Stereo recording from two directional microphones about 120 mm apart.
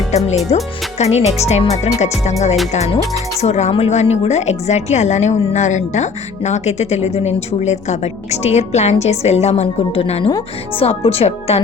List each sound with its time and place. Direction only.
0.5 s a woman's voice: 65° left (ahead or behind)